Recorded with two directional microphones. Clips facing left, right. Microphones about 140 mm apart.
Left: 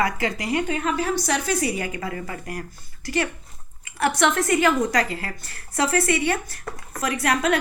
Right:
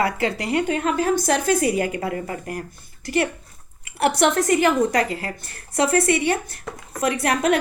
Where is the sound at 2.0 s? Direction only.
35° right (ahead or behind).